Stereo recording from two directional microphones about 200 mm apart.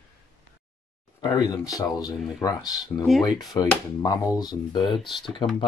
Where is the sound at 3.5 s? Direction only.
20° left (ahead or behind).